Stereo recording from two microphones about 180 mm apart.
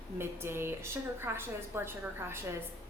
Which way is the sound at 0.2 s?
15° right (ahead or behind).